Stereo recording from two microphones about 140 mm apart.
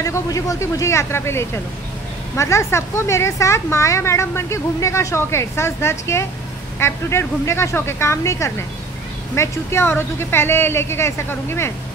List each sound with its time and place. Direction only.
0.0 s a woman's voice: 25° left (ahead or behind)